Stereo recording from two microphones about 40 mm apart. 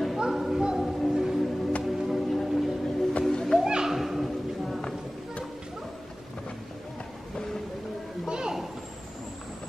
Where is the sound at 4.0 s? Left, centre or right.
Centre.